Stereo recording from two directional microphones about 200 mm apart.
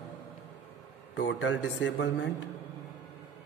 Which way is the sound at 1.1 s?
65° left (ahead or behind).